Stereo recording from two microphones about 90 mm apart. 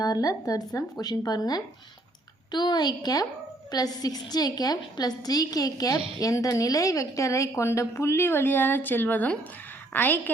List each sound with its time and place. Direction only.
0.0 s a woman's voice: 45° left (ahead or behind); by 10.3 s 20° left (ahead or behind)